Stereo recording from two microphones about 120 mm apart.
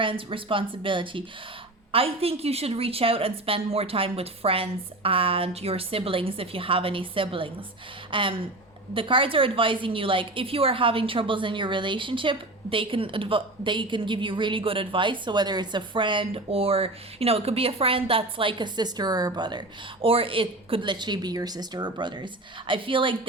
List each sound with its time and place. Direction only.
0.0 s a woman's voice: 45° right (ahead or behind)